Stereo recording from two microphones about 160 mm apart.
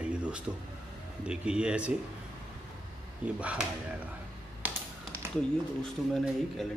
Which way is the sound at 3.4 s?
10° right (ahead or behind).